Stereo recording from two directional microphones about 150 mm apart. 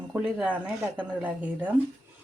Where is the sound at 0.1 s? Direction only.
10° right (ahead or behind).